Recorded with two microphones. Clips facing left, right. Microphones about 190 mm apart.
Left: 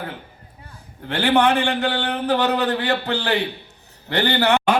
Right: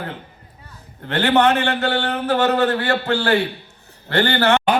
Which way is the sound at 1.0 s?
10° left (ahead or behind).